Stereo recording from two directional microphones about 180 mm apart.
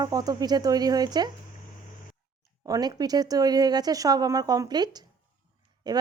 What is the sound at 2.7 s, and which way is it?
Speech, 20° right (ahead or behind).